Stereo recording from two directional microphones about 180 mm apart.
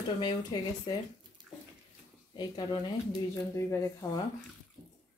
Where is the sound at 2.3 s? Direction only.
25° left (ahead or behind).